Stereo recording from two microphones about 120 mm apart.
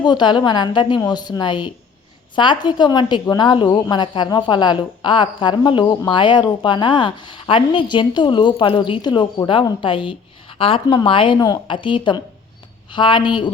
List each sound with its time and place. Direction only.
0.0 s a woman's voice: 40° left (ahead or behind)
11.3 s a woman's voice: 30° left (ahead or behind)